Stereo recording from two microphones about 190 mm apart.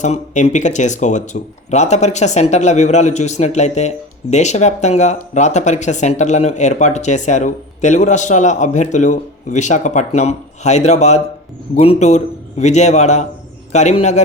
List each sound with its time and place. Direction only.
0.0 s speech: 35° left (ahead or behind)